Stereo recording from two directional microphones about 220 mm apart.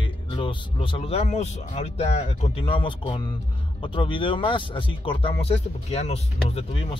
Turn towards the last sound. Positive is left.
turn(degrees=25)  # may be behind; listen again after turning